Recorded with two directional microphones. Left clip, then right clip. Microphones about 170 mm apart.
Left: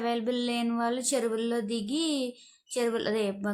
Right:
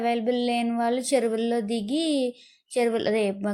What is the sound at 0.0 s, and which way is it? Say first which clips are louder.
A woman's voice: right 5 dB; 15° right (ahead or behind).